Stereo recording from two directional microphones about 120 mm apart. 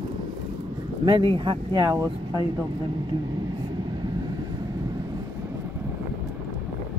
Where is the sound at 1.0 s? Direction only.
45° right (ahead or behind).